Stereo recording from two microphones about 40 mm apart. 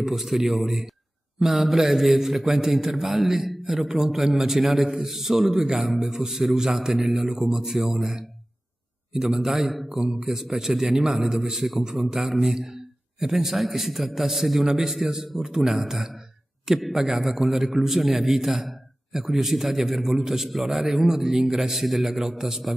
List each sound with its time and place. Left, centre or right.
0.0 s a man's voice: centre
9.8 s a man's voice: centre